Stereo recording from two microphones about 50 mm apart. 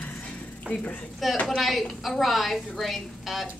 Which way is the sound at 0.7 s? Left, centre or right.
Left.